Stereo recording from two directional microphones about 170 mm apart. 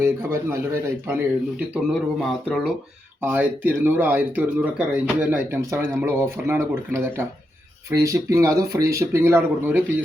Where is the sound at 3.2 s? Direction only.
10° right (ahead or behind).